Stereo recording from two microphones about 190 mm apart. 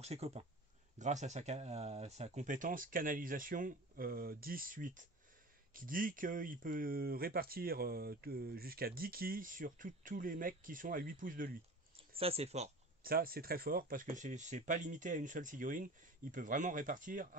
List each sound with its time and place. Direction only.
0.0 s speech: 35° right (ahead or behind)
12.2 s speech: 30° right (ahead or behind)
13.0 s speech: 50° right (ahead or behind)